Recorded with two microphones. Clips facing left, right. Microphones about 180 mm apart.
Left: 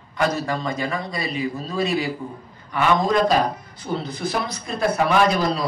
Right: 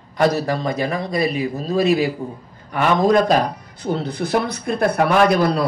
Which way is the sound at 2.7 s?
55° right (ahead or behind).